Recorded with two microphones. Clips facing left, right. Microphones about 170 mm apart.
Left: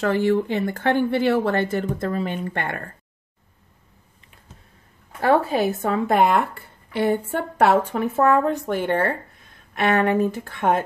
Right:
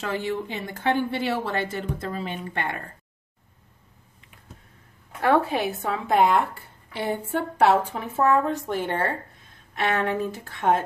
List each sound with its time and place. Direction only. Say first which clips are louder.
0.0 s speech: left 8 dB; 55° left (ahead or behind)
5.2 s speech: left 3 dB; 40° left (ahead or behind); by 10.8 s 55° left (ahead or behind)